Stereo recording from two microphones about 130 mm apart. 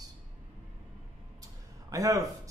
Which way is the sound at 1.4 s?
25° right (ahead or behind).